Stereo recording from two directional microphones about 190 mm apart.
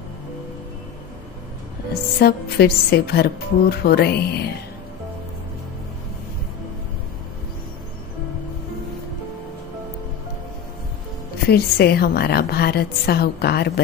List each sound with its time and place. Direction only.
2.1 s a woman's voice: 55° left (ahead or behind)
11.4 s a woman's voice: 55° left (ahead or behind)